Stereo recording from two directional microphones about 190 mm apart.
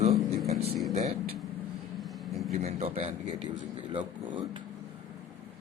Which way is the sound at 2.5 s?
35° right (ahead or behind).